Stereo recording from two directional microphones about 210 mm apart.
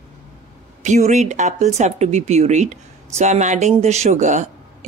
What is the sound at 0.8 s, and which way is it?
Speech, 35° right (ahead or behind).